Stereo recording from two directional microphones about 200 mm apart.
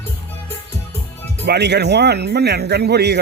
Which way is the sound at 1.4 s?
55° right (ahead or behind).